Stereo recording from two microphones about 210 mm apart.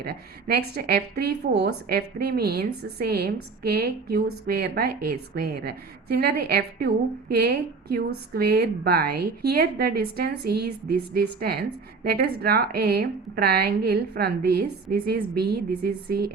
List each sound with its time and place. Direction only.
0.0 s a woman's voice: 50° right (ahead or behind)